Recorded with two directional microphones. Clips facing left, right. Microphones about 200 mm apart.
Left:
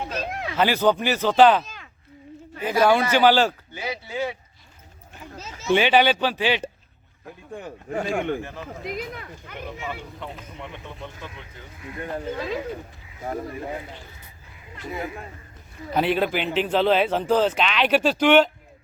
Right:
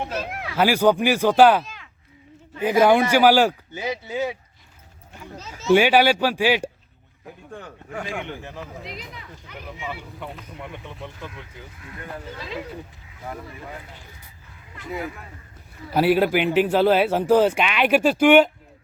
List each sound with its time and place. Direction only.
0.5 s speech: 10° right (ahead or behind)
1.6 s a sound: 45° left (ahead or behind)
2.6 s speech: 15° right (ahead or behind)
5.7 s speech: 10° right (ahead or behind)
8.0 s speech: 45° left (ahead or behind)
8.6 s speech: centre (ahead or behind)
9.0 s speech: 50° left (ahead or behind)
9.8 s speech: 10° right (ahead or behind)
12.3 s speech: 50° left (ahead or behind)
13.2 s speech: 35° left (ahead or behind)
15.9 s speech: 5° right (ahead or behind)